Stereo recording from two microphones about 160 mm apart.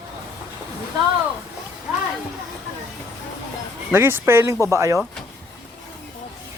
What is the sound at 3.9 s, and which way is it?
Speech, 15° right (ahead or behind).